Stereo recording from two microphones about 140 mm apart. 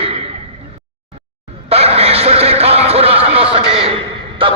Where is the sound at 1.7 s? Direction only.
45° right (ahead or behind).